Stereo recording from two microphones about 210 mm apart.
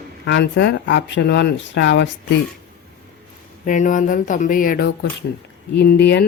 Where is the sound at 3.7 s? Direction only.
40° left (ahead or behind).